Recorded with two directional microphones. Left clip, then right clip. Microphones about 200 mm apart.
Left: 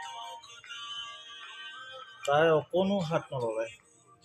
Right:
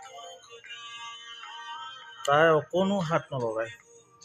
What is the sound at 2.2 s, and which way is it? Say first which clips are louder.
Speech: right 3 dB; 20° right (ahead or behind).